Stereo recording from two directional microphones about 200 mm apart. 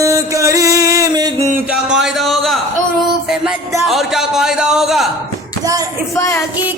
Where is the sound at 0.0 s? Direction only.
15° right (ahead or behind).